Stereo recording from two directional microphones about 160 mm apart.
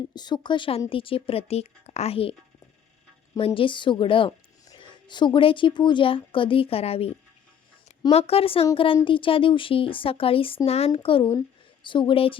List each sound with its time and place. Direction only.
0.1 s speech: 25° left (ahead or behind)
3.3 s speech: 35° left (ahead or behind)
8.1 s speech: 35° left (ahead or behind)